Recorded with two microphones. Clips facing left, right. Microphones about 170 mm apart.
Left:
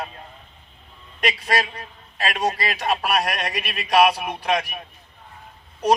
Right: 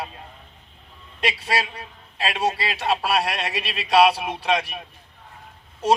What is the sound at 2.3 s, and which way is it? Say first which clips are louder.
A man's voice: even; 25° right (ahead or behind).